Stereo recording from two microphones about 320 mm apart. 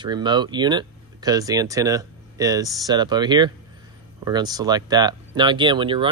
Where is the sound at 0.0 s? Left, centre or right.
Centre.